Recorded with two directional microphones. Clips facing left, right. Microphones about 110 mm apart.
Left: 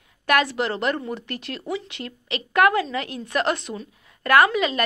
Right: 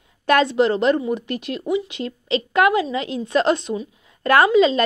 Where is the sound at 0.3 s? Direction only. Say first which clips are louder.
Right 5 dB; 25° right (ahead or behind).